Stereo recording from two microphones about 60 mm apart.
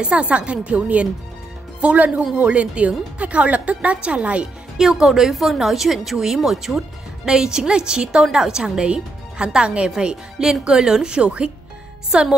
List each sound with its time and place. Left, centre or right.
0.0 s a woman's voice: right
4.7 s a woman's voice: centre